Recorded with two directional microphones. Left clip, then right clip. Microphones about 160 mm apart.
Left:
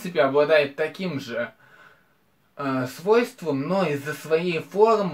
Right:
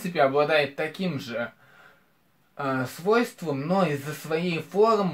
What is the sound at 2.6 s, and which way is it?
Speech, 15° right (ahead or behind).